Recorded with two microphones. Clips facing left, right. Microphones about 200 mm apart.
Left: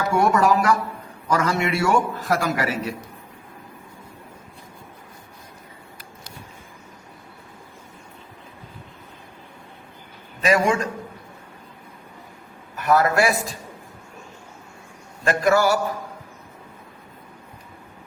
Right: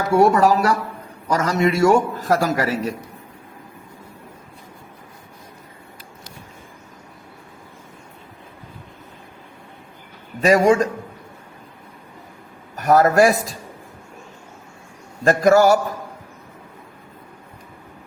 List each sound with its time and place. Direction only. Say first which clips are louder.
0.2 s a man's voice: right 4 dB; 35° right (ahead or behind)
10.4 s a man's voice: right 5 dB; 40° right (ahead or behind)
12.7 s a man's voice: right 4 dB; 40° right (ahead or behind)
15.2 s a man's voice: right 5 dB; 40° right (ahead or behind)